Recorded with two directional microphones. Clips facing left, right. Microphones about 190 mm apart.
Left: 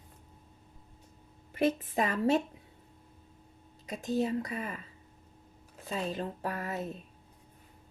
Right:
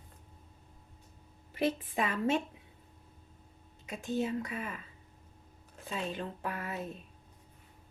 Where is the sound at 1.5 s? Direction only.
45° left (ahead or behind).